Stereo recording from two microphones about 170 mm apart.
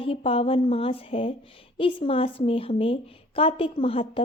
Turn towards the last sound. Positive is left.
turn(degrees=35)  # may be behind; listen again after turning